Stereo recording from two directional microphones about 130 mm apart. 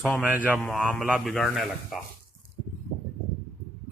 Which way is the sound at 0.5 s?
Centre (ahead or behind).